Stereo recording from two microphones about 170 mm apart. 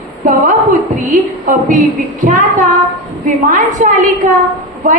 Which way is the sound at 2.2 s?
50° right (ahead or behind).